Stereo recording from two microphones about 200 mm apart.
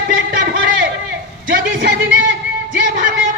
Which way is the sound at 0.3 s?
70° right (ahead or behind).